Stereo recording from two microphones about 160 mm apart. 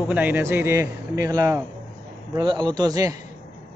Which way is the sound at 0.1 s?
10° right (ahead or behind).